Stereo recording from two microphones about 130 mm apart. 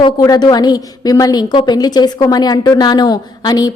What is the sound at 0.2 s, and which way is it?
A woman's voice, 30° left (ahead or behind).